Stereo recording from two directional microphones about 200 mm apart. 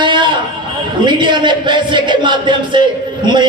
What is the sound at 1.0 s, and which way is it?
A man's voice, 25° right (ahead or behind).